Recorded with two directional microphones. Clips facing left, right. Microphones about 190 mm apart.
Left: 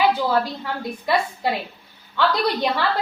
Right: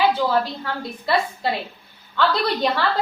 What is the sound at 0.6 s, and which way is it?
Speech, 15° left (ahead or behind).